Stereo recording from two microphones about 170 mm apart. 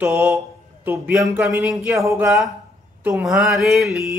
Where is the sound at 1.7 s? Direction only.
Centre (ahead or behind).